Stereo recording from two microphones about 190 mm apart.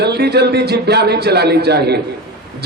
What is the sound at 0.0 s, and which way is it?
A man's voice, 60° right (ahead or behind).